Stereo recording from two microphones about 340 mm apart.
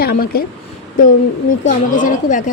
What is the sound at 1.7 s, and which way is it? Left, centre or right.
Speech, left.